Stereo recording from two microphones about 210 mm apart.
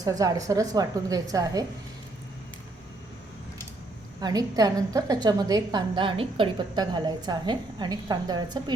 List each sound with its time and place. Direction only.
0.0 s a woman's voice: 15° right (ahead or behind)
4.2 s a woman's voice: 20° right (ahead or behind)